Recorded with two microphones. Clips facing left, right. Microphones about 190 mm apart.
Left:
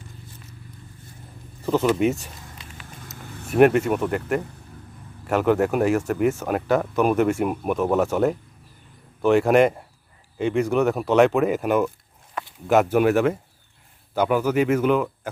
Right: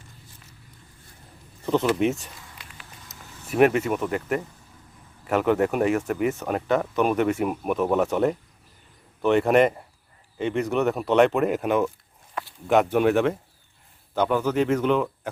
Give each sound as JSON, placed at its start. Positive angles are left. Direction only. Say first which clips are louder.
{"t": 1.6, "sound": "speech", "louder": "left 2 dB", "side_deg": 5}
{"t": 3.2, "sound": "vehicle", "louder": "left 7 dB", "side_deg": 60}
{"t": 3.5, "sound": "speech", "louder": "left 3 dB", "side_deg": 0}